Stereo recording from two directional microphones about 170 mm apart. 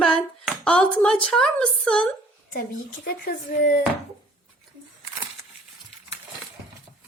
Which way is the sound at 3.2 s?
55° left (ahead or behind).